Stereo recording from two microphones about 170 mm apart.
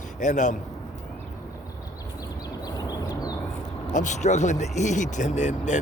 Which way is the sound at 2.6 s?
20° left (ahead or behind).